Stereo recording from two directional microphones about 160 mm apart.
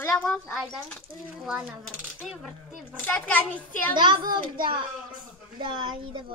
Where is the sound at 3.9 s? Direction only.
30° right (ahead or behind).